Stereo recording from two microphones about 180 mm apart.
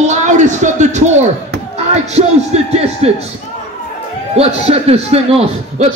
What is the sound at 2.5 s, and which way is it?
Speech, 40° right (ahead or behind).